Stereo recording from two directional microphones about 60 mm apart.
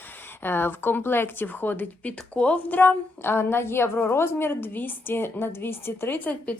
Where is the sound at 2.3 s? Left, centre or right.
Left.